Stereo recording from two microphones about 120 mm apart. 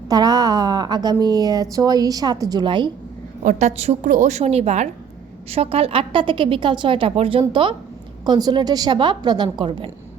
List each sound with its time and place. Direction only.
0.1 s a woman's voice: 30° right (ahead or behind)
3.4 s a woman's voice: 70° right (ahead or behind); by 7.8 s 45° right (ahead or behind)
8.2 s a woman's voice: 35° right (ahead or behind)